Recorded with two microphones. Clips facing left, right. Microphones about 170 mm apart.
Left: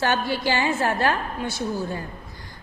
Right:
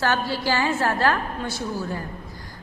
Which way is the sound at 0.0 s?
20° left (ahead or behind).